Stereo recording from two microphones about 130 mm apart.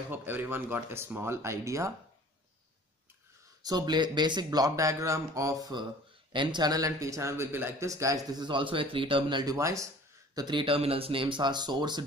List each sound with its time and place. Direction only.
0.1 s speech: 15° right (ahead or behind)
3.6 s speech: 30° right (ahead or behind)
8.3 s speech: 35° right (ahead or behind)
10.3 s speech: 35° right (ahead or behind)